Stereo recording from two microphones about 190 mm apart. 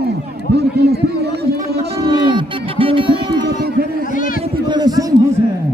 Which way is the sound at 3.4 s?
55° right (ahead or behind).